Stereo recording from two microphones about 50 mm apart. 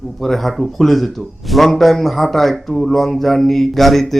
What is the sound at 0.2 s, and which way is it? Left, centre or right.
A man's voice, centre.